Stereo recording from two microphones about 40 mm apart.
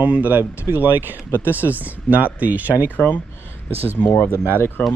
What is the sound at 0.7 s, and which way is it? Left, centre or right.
Speech, right.